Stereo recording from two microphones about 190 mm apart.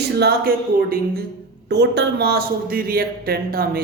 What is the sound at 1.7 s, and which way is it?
A man's voice, 60° right (ahead or behind).